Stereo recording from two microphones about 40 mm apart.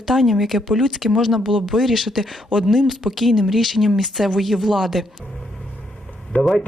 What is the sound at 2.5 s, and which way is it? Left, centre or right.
Speech, centre.